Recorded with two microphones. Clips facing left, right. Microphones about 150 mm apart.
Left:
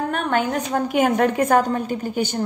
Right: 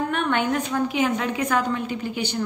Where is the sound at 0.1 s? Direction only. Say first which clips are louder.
Left 1 dB; 40° left (ahead or behind).